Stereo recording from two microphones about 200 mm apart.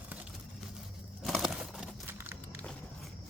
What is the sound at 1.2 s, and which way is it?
Crumpling, centre (ahead or behind).